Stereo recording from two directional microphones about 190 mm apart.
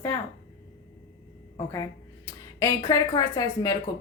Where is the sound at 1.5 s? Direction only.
20° left (ahead or behind).